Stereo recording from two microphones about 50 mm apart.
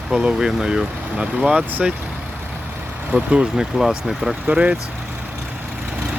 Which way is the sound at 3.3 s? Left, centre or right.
Centre.